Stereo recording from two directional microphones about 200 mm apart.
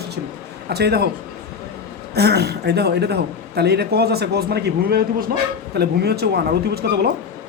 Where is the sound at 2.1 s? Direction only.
55° right (ahead or behind).